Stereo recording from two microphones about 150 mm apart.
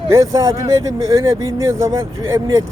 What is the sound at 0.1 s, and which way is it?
Speech, 20° right (ahead or behind).